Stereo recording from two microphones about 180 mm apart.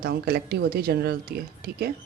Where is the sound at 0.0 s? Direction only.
60° right (ahead or behind).